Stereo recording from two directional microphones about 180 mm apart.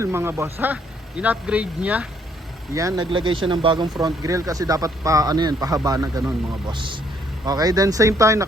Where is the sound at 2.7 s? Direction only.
20° right (ahead or behind).